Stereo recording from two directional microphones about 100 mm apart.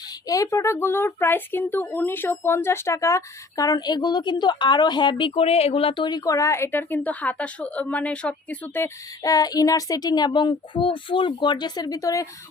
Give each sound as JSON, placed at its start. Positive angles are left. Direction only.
{"t": 0.3, "sound": "speech", "side_deg": 35}
{"t": 9.2, "sound": "speech", "side_deg": 40}